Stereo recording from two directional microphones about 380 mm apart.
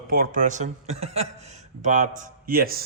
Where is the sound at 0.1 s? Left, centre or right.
Right.